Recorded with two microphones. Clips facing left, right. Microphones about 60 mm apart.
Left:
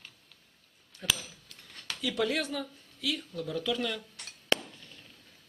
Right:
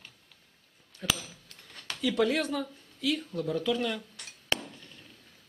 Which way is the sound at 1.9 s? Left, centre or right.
Right.